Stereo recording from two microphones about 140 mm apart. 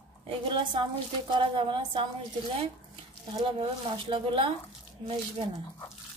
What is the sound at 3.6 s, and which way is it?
Speech, 40° right (ahead or behind).